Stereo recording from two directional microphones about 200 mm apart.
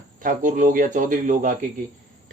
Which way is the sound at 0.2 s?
40° right (ahead or behind).